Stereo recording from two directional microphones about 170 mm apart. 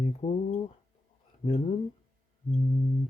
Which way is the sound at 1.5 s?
40° left (ahead or behind).